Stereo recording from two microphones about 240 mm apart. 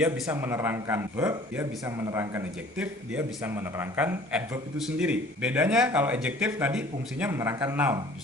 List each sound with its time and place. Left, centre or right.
0.0 s a man's voice: centre